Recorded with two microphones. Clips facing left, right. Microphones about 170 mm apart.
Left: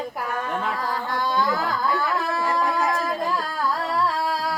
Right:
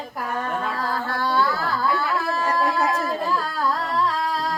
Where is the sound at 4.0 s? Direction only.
10° left (ahead or behind).